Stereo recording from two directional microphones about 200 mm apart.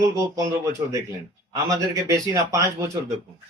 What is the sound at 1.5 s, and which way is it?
Speech, 15° right (ahead or behind).